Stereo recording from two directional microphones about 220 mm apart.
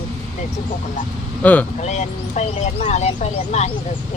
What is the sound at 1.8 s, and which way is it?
Speech, 30° left (ahead or behind).